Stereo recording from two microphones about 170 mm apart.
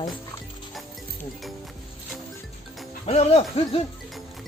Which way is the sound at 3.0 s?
35° left (ahead or behind).